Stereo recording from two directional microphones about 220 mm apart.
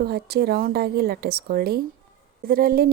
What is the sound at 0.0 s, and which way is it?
Speech, 45° right (ahead or behind).